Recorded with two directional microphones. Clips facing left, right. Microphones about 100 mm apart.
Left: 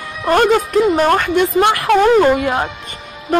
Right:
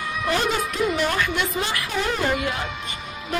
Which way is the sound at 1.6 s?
65° left (ahead or behind).